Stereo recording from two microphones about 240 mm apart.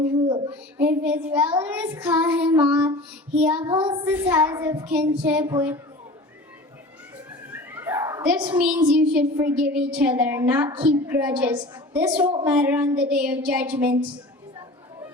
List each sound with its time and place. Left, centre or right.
0.0 s a sound: centre
0.8 s child singing: centre
7.5 s a child's voice: centre
9.0 s child singing: centre